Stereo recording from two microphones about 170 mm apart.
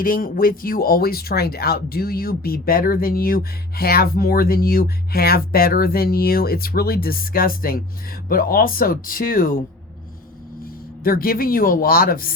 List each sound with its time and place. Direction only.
0.0 s speech: 55° left (ahead or behind)
10.6 s speech: 60° left (ahead or behind)